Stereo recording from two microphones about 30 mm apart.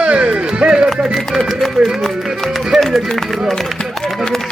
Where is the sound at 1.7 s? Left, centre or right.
Centre.